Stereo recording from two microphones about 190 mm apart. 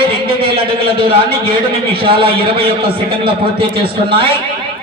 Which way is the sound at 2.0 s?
25° right (ahead or behind).